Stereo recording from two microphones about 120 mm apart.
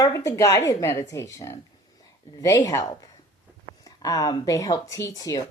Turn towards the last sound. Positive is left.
turn(degrees=30)  # may be behind; listen again after turning